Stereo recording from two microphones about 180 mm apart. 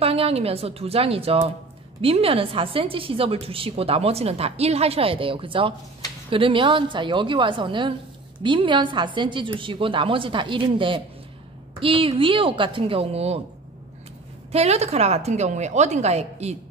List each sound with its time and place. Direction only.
0.0 s a woman's voice: 30° right (ahead or behind)
14.5 s a woman's voice: 35° right (ahead or behind)